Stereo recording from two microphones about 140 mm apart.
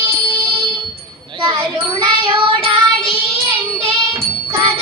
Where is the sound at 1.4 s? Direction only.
35° right (ahead or behind).